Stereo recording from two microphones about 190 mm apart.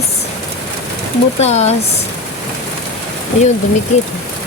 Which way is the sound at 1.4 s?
35° left (ahead or behind).